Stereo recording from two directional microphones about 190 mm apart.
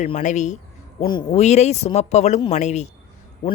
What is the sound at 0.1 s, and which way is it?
Speech, 40° left (ahead or behind).